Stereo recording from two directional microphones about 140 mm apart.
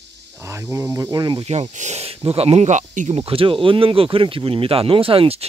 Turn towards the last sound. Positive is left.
turn(degrees=-40)  # may be behind; listen again after turning